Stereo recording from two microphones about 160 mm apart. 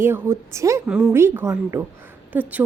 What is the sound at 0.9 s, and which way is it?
Speech, 5° right (ahead or behind).